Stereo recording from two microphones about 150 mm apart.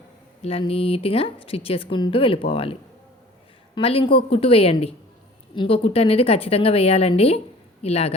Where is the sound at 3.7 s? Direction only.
35° left (ahead or behind).